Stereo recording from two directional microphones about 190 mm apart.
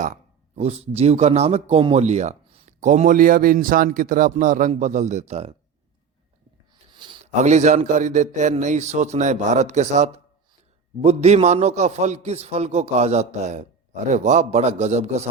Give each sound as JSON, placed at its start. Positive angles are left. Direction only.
{"t": 0.5, "sound": "speech", "side_deg": -35}
{"t": 6.9, "sound": "a sound", "side_deg": -25}
{"t": 7.3, "sound": "speech", "side_deg": -40}